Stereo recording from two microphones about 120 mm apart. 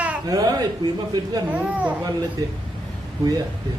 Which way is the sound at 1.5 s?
10° right (ahead or behind).